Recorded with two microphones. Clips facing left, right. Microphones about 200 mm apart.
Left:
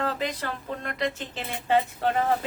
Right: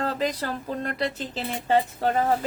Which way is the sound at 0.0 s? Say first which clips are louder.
Right 2 dB; 40° right (ahead or behind).